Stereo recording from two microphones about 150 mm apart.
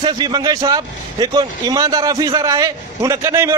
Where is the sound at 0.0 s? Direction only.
30° right (ahead or behind).